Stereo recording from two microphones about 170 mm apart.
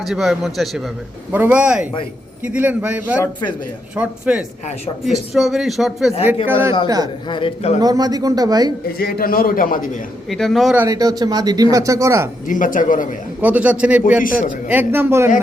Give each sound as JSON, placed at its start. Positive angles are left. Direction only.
{"t": 0.0, "sound": "a man's voice", "side_deg": 0}
{"t": 6.5, "sound": "a man's voice", "side_deg": -15}
{"t": 7.3, "sound": "a man's voice", "side_deg": 30}
{"t": 7.8, "sound": "a man's voice", "side_deg": -25}
{"t": 8.9, "sound": "a man's voice", "side_deg": 65}
{"t": 10.2, "sound": "speech", "side_deg": 0}
{"t": 10.8, "sound": "a man's voice", "side_deg": -20}
{"t": 12.5, "sound": "speech", "side_deg": 50}
{"t": 13.4, "sound": "a man's voice", "side_deg": -10}